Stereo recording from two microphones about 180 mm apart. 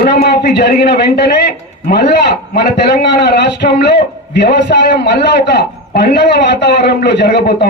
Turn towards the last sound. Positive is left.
turn(degrees=65)  # may be behind; listen again after turning